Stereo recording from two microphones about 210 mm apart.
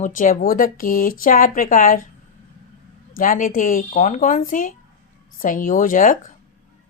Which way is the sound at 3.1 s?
40° left (ahead or behind).